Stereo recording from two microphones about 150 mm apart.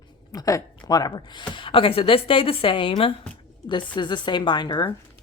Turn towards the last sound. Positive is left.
turn(degrees=30)  # may be behind; listen again after turning